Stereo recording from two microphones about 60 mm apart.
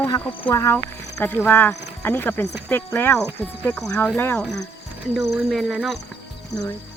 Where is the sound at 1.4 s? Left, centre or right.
Left.